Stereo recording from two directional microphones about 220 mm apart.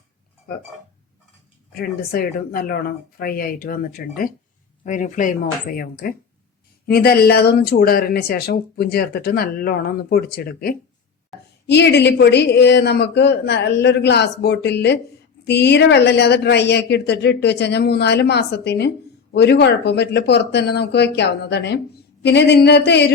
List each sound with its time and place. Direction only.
1.7 s speech: 45° left (ahead or behind)